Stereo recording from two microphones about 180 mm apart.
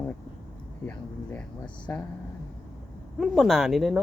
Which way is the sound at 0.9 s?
5° left (ahead or behind).